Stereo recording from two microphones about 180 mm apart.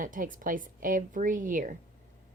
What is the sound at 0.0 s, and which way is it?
A woman's voice, 50° right (ahead or behind).